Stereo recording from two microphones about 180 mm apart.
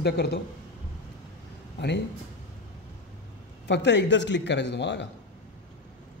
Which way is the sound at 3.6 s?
75° left (ahead or behind).